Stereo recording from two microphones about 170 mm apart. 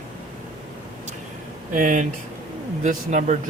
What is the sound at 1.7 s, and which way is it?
Speech, 50° right (ahead or behind).